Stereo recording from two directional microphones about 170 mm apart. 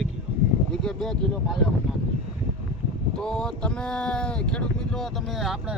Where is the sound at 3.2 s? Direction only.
5° left (ahead or behind).